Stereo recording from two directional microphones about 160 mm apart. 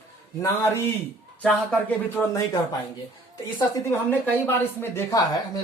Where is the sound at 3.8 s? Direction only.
15° left (ahead or behind).